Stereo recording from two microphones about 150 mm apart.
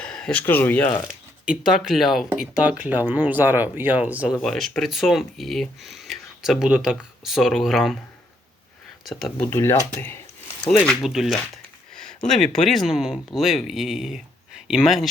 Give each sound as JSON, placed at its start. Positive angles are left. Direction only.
{"t": 0.0, "sound": "speech", "side_deg": 5}
{"t": 1.0, "sound": "speech", "side_deg": -5}
{"t": 4.4, "sound": "speech", "side_deg": 0}
{"t": 9.0, "sound": "speech", "side_deg": 0}
{"t": 9.4, "sound": "speech", "side_deg": 15}
{"t": 11.0, "sound": "speech", "side_deg": 0}